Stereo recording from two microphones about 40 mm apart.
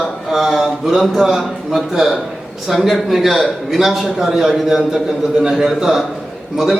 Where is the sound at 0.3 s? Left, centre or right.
Centre.